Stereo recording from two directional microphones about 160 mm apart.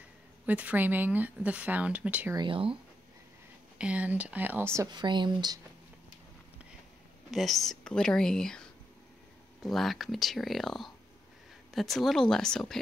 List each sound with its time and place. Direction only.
0.5 s speech: 10° right (ahead or behind)
2.3 s speech: 30° right (ahead or behind)
3.7 s speech: 10° right (ahead or behind)
4.9 s speech: 30° right (ahead or behind)
7.2 s speech: centre (ahead or behind)